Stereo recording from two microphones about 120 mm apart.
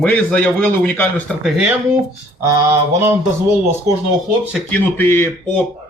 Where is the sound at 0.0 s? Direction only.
10° left (ahead or behind).